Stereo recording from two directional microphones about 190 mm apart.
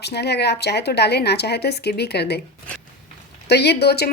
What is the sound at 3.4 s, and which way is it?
Speech, 60° left (ahead or behind).